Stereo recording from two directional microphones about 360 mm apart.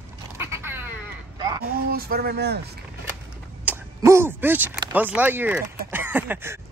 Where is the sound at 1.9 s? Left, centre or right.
Right.